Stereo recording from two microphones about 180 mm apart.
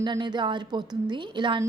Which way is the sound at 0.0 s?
25° right (ahead or behind).